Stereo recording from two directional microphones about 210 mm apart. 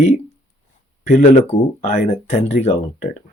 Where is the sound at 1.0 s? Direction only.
35° left (ahead or behind).